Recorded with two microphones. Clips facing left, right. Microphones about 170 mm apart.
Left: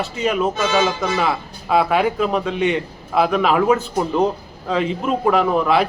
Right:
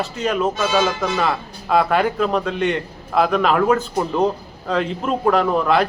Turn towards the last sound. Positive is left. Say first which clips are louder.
# even
turn(degrees=5)  # may be behind; listen again after turning